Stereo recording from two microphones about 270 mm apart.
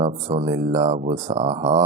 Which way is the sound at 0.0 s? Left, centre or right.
Right.